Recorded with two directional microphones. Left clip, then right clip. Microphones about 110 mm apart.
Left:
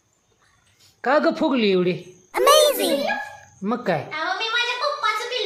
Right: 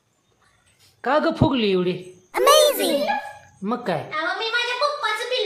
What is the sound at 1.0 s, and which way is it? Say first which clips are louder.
Speech: left 1 dB; 10° left (ahead or behind).